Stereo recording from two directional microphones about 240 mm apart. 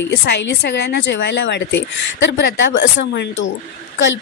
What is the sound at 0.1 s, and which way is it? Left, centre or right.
Speech, left.